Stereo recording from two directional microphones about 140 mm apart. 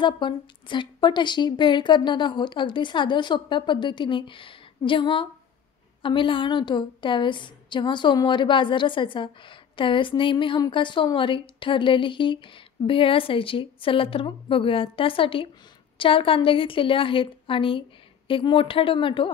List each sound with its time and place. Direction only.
0.0 s a woman's voice: 35° left (ahead or behind)